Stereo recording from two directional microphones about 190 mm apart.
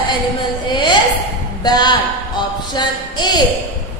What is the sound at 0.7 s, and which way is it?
Speech, 25° left (ahead or behind).